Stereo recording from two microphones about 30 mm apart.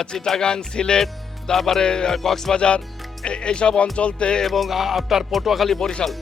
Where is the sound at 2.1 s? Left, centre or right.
Centre.